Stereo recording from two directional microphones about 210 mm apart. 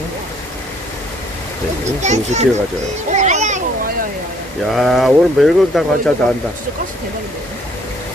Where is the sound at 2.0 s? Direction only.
35° right (ahead or behind).